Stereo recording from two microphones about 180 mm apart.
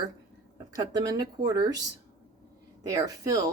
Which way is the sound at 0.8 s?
20° right (ahead or behind).